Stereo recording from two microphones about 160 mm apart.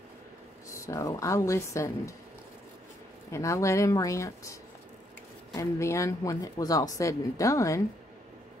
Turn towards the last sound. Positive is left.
turn(degrees=20)  # may be behind; listen again after turning